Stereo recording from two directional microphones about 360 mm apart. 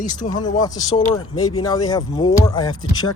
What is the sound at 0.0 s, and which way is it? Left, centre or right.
Speech, centre.